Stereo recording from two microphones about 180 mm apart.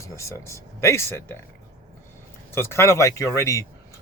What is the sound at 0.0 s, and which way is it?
Speech, 15° left (ahead or behind).